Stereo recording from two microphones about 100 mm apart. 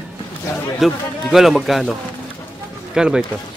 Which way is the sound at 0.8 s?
Centre (ahead or behind).